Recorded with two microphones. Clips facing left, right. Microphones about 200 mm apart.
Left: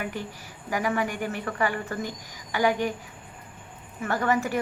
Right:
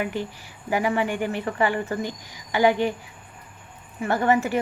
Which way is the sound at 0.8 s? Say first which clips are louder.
Right 3 dB; 15° right (ahead or behind).